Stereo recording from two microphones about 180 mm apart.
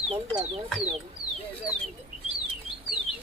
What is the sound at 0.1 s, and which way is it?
Speech, 35° right (ahead or behind).